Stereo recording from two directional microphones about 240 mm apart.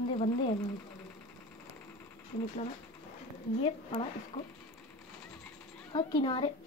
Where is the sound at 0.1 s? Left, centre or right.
Left.